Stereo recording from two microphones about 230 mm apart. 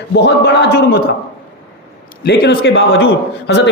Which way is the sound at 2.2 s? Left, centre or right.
Left.